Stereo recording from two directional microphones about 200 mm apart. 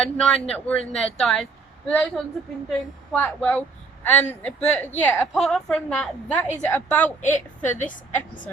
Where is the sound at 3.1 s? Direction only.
5° left (ahead or behind).